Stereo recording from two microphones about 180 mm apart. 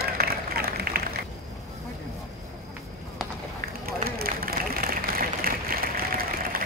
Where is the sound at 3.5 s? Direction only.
55° right (ahead or behind).